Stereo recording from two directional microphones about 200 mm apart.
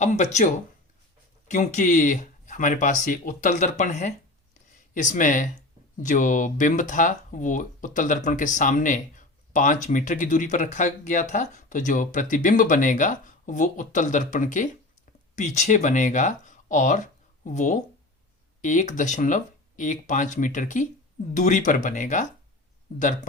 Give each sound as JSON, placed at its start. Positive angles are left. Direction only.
{"t": 0.0, "sound": "speech", "side_deg": 35}